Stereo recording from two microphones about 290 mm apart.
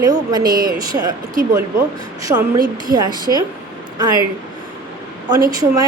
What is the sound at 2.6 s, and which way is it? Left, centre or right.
Speech, right.